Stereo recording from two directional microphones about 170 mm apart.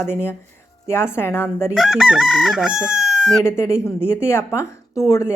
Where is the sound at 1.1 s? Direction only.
15° left (ahead or behind).